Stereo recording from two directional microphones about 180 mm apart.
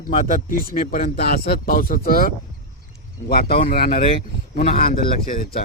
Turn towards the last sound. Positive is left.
turn(degrees=55)  # may be behind; listen again after turning